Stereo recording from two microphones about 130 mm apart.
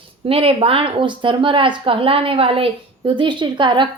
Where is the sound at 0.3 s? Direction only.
45° right (ahead or behind).